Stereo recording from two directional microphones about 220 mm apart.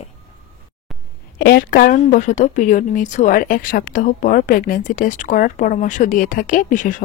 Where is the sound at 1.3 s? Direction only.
45° left (ahead or behind).